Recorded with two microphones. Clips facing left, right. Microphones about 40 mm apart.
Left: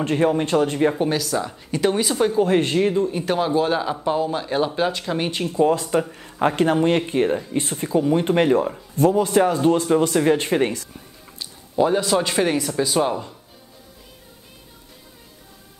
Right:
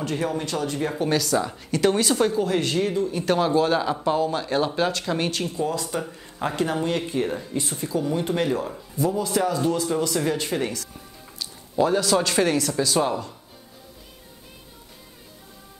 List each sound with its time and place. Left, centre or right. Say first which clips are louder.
0.0 s speech: left 7 dB; left
1.0 s speech: even; centre
1.7 s speech: even; centre
2.3 s speech: left 5 dB; left
3.3 s speech: right 3 dB; centre
5.5 s speech: left 8 dB; left
11.3 s speech: left 2 dB; centre